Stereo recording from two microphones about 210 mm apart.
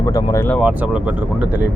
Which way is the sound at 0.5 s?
5° right (ahead or behind).